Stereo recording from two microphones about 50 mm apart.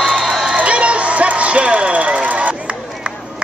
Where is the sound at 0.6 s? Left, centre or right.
Right.